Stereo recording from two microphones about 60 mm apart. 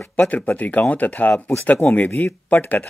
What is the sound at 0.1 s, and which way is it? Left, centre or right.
Speech, left.